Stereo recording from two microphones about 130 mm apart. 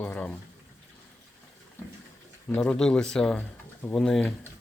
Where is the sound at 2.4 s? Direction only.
10° left (ahead or behind).